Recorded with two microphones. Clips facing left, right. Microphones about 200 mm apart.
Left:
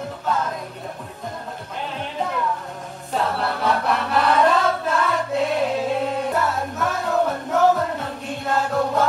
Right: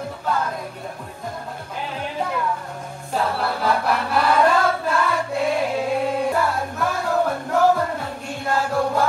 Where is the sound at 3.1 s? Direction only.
Centre (ahead or behind).